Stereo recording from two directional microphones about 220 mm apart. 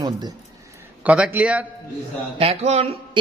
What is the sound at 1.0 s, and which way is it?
Speech, 5° right (ahead or behind).